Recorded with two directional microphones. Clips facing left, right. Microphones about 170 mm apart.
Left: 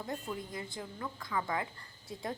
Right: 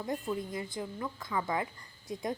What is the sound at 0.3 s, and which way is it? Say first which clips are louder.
A woman's voice: right 5 dB; 20° right (ahead or behind).